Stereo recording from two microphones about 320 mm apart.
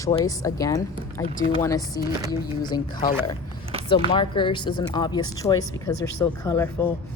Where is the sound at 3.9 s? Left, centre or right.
Centre.